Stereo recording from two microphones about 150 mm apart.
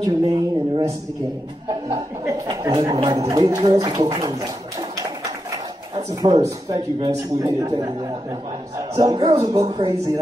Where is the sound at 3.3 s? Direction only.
30° right (ahead or behind).